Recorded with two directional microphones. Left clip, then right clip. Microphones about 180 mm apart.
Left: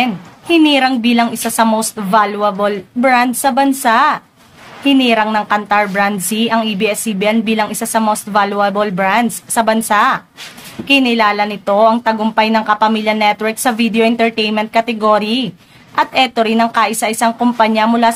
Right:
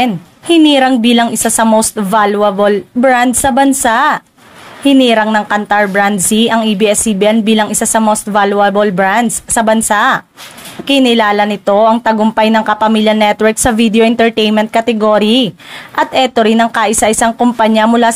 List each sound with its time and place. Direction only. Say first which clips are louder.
0.0 s speech: right 3 dB; 50° right (ahead or behind)